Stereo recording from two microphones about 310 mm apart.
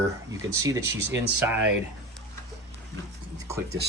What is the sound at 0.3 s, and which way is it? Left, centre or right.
Speech, centre.